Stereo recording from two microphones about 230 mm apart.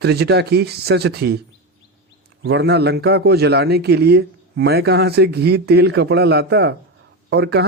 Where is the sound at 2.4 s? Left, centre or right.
Right.